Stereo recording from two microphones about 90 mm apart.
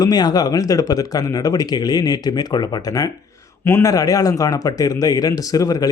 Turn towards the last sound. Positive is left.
turn(degrees=40)  # may be behind; listen again after turning